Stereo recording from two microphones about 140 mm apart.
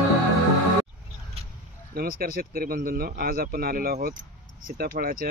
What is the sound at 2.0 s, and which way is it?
Speech, 90° right.